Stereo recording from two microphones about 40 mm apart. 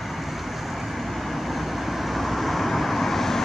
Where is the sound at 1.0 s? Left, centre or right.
Centre.